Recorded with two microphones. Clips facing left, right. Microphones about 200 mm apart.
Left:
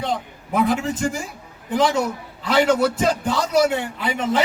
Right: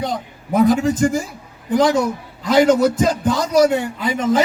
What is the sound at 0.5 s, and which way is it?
Speech, 40° right (ahead or behind).